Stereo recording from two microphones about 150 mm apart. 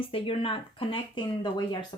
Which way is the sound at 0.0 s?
35° left (ahead or behind).